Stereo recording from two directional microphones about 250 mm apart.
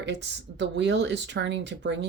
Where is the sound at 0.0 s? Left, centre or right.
Right.